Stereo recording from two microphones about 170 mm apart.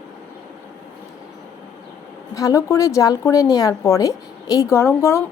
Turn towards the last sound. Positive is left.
turn(degrees=15)  # may be behind; listen again after turning